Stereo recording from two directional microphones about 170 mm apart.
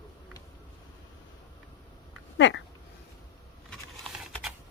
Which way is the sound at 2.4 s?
90° left.